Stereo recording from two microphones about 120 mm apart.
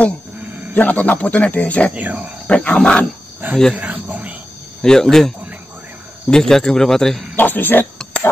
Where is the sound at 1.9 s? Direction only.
15° right (ahead or behind).